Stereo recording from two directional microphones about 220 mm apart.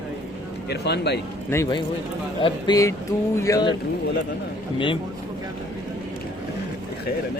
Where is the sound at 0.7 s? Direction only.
50° left (ahead or behind).